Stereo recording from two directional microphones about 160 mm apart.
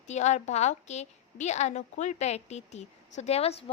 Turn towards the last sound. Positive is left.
turn(degrees=40)  # may be behind; listen again after turning